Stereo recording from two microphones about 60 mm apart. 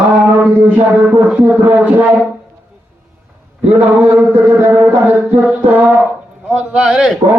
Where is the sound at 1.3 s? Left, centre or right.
Right.